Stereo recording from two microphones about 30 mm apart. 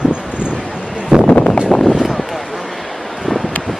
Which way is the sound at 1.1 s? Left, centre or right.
Right.